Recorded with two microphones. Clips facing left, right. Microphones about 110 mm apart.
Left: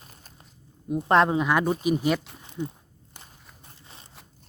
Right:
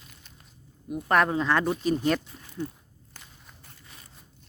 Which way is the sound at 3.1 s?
25° left (ahead or behind).